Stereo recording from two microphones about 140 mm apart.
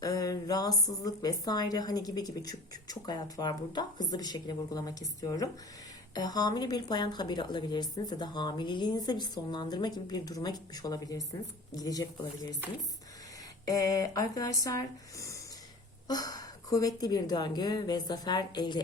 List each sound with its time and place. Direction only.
0.0 s a woman's voice: 25° left (ahead or behind)
13.7 s a woman's voice: 25° left (ahead or behind)